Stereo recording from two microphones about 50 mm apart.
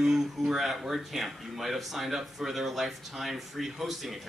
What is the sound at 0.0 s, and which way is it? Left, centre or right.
Speech, centre.